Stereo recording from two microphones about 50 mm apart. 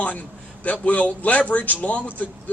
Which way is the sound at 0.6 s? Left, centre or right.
Left.